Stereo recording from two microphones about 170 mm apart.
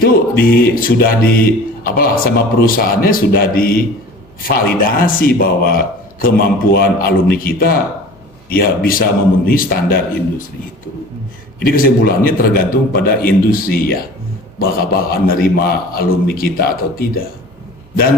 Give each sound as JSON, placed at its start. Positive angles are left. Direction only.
{"t": 0.0, "sound": "speech", "side_deg": 60}
{"t": 11.6, "sound": "speech", "side_deg": 60}